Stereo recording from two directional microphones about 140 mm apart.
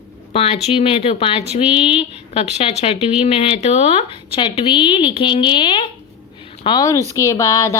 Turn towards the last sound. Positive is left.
turn(degrees=20)  # may be behind; listen again after turning